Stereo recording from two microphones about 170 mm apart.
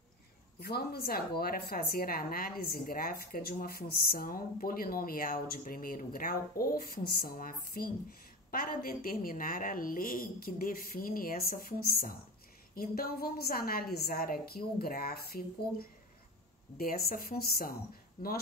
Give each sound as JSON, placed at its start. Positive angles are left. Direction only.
{"t": 0.6, "sound": "a woman's voice", "side_deg": 65}